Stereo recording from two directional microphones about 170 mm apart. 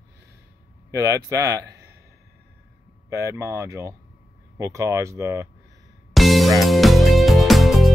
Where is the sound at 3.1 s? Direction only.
15° right (ahead or behind).